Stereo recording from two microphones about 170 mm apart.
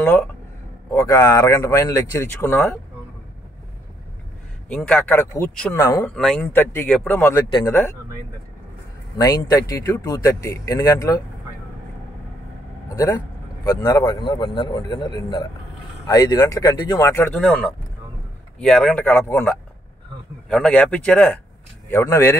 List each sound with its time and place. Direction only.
0.0 s speech: 10° left (ahead or behind)
4.6 s speech: 10° left (ahead or behind)
6.1 s speech: 5° left (ahead or behind)
9.2 s speech: 25° left (ahead or behind)
12.8 s speech: 20° left (ahead or behind)
17.4 s speech: 5° left (ahead or behind)